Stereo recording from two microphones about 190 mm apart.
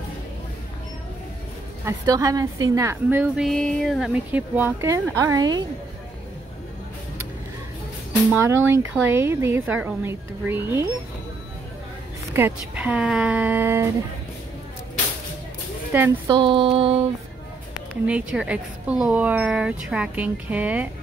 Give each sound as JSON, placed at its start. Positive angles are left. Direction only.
{"t": 1.9, "sound": "a woman's voice", "side_deg": -15}
{"t": 8.3, "sound": "a woman's voice", "side_deg": -10}
{"t": 12.4, "sound": "a woman's voice", "side_deg": -10}
{"t": 15.9, "sound": "a woman's voice", "side_deg": -10}
{"t": 16.3, "sound": "a sound", "side_deg": -25}
{"t": 18.0, "sound": "a woman's voice", "side_deg": -5}